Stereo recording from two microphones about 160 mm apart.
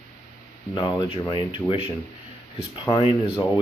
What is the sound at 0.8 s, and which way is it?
Speech, 25° left (ahead or behind).